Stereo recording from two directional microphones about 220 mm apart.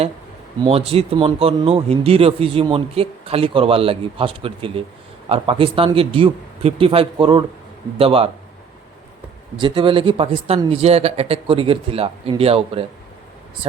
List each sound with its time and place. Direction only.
0.6 s speech: 25° right (ahead or behind)
9.6 s speech: 25° right (ahead or behind)